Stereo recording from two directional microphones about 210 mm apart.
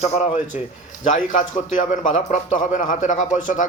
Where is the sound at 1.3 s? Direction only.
35° left (ahead or behind).